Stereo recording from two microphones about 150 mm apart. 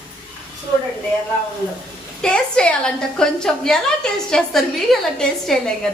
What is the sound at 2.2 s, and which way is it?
A woman's voice, 5° left (ahead or behind).